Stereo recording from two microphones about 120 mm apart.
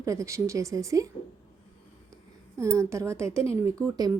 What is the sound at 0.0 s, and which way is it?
A woman's voice, 25° right (ahead or behind).